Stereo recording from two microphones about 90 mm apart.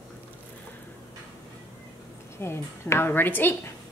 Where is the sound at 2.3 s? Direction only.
30° left (ahead or behind).